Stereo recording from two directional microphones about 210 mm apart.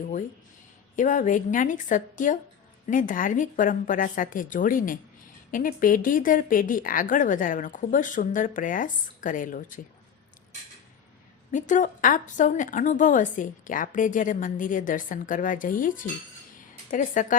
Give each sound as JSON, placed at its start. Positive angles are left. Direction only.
{"t": 0.9, "sound": "a woman's voice", "side_deg": 40}
{"t": 11.5, "sound": "a woman's voice", "side_deg": 35}